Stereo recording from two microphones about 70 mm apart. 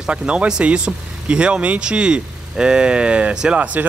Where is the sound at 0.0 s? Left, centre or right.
Centre.